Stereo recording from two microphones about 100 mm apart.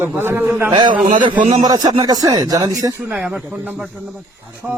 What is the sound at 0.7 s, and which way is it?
Speech, 50° right (ahead or behind).